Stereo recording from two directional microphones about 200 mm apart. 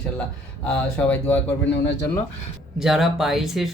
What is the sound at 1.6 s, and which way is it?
Speech, 60° left (ahead or behind).